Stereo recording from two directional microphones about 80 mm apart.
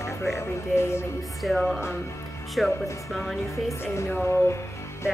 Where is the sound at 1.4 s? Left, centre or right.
Centre.